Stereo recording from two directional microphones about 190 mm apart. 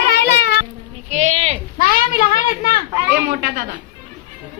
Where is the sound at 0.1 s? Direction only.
55° left (ahead or behind).